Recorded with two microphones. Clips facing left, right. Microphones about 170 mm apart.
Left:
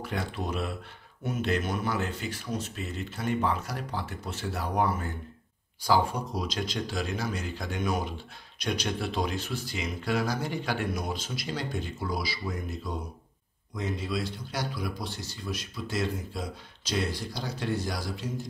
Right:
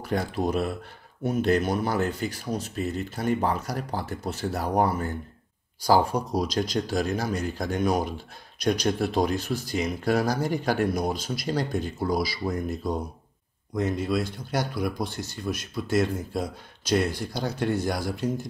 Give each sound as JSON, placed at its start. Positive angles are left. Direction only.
{"t": 0.0, "sound": "speech", "side_deg": -40}